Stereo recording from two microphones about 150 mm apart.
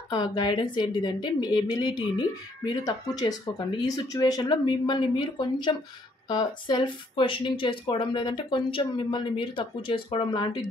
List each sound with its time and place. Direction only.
0.1 s a woman's voice: 30° left (ahead or behind)